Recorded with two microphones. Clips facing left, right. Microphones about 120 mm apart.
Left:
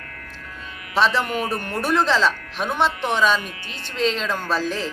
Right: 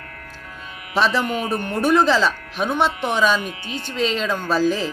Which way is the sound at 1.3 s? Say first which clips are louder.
Right 2 dB; 25° right (ahead or behind).